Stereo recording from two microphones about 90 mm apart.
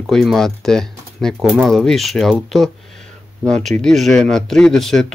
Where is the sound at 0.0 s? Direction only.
5° left (ahead or behind).